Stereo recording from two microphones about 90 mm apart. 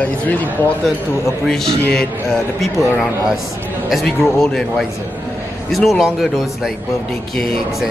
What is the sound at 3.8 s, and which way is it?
Speech, centre (ahead or behind).